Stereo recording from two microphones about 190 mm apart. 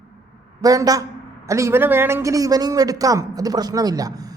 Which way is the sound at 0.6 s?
20° right (ahead or behind).